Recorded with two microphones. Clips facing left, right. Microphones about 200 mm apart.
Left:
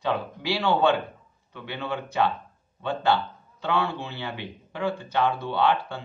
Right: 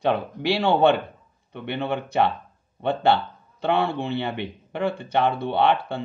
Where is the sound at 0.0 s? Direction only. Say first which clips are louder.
Right 5 dB; 60° right (ahead or behind).